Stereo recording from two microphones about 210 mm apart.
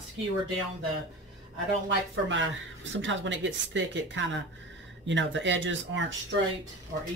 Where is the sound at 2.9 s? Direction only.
60° right (ahead or behind).